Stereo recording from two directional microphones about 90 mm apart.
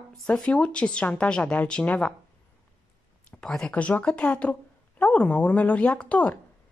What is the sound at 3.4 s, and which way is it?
A woman's voice, 5° left (ahead or behind).